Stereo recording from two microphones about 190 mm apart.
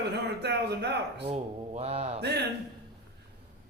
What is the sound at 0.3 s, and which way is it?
A man's voice, 60° right (ahead or behind).